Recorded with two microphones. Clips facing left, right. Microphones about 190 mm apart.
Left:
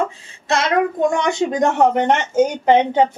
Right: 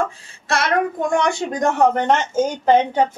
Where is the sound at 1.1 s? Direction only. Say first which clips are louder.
Left 1 dB; 20° left (ahead or behind).